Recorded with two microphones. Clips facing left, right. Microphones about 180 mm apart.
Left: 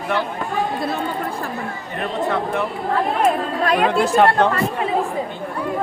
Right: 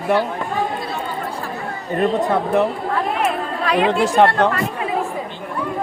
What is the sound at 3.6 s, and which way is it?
Speech, 45° left (ahead or behind).